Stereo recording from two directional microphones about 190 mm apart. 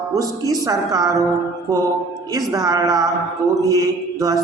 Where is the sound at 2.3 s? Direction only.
20° right (ahead or behind).